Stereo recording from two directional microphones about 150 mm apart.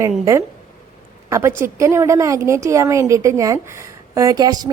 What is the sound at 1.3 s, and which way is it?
A woman's voice, 15° right (ahead or behind).